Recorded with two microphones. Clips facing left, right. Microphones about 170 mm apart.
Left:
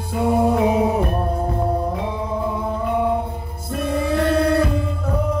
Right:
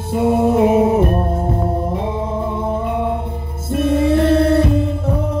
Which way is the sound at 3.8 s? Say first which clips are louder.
Right 6 dB; 25° right (ahead or behind).